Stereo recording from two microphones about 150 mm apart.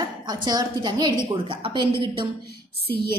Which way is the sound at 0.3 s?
25° right (ahead or behind).